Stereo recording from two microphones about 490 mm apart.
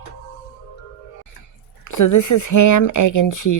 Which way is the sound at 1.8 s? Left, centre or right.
Left.